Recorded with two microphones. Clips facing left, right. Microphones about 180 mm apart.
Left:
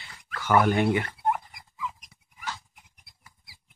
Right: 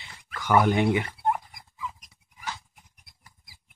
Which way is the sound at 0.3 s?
15° right (ahead or behind).